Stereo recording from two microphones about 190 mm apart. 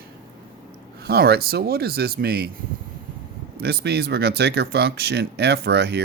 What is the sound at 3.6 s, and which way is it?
Speech, 60° right (ahead or behind).